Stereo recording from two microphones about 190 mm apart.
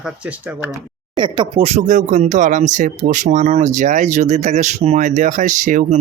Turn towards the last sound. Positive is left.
turn(degrees=-40)  # may be behind; listen again after turning